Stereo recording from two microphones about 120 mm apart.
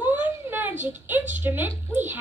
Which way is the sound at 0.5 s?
15° right (ahead or behind).